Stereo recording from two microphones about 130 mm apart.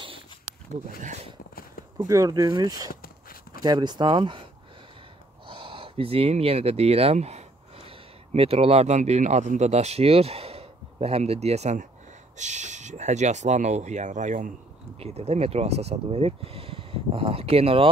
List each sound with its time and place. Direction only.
2.0 s speech: 25° right (ahead or behind)
2.9 s a sound: 90° left
3.6 s speech: 35° right (ahead or behind)
5.5 s speech: 40° right (ahead or behind); by 14.5 s 75° right (ahead or behind)
15.0 s speech: 55° right (ahead or behind)